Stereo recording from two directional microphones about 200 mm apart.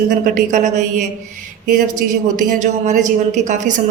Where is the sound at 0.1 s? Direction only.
40° right (ahead or behind).